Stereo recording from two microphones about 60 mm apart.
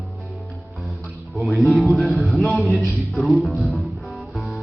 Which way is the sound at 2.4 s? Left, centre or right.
Left.